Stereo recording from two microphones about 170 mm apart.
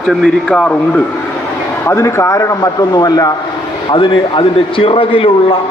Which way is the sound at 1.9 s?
15° left (ahead or behind).